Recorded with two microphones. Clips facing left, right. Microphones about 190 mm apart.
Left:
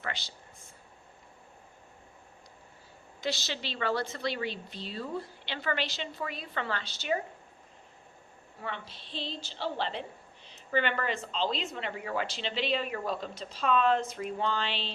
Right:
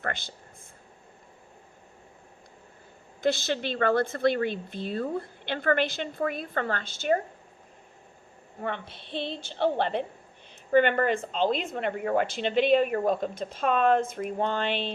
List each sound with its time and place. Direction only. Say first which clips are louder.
0.0 s speech: right 5 dB; 50° right (ahead or behind)
3.2 s speech: right 8 dB; 55° right (ahead or behind)
8.6 s a woman's voice: right 6 dB; 55° right (ahead or behind)